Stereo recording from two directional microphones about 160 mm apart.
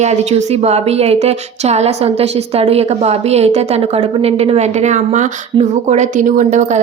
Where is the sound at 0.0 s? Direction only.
45° right (ahead or behind).